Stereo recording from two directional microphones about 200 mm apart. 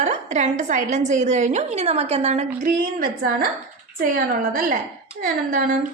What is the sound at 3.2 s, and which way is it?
A woman's voice, 45° right (ahead or behind).